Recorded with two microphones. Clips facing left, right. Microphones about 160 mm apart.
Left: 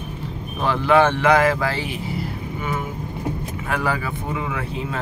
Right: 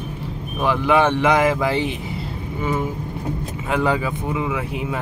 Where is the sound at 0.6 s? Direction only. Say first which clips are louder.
Even; 15° right (ahead or behind).